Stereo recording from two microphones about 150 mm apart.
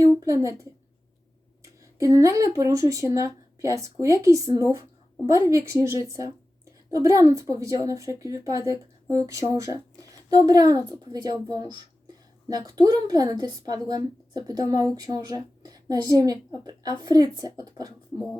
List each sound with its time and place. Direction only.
0.2 s a woman's voice: 20° right (ahead or behind)
1.8 s a woman's voice: 20° right (ahead or behind)